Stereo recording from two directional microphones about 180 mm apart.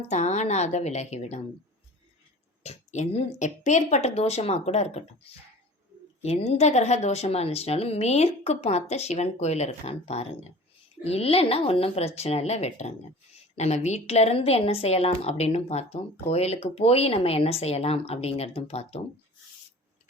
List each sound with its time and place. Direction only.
0.1 s speech: 40° left (ahead or behind)
2.6 s speech: 40° left (ahead or behind)
6.2 s speech: 35° left (ahead or behind)